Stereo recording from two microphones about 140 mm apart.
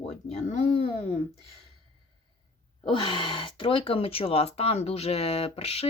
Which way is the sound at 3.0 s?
40° left (ahead or behind).